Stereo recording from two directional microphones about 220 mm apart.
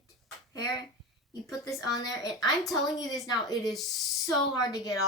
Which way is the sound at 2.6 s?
Centre (ahead or behind).